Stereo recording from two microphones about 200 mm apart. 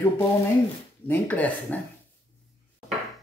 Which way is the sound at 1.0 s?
10° left (ahead or behind).